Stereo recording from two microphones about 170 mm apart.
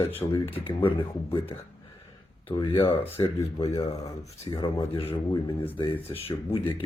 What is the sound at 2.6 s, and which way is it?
Speech, 30° left (ahead or behind).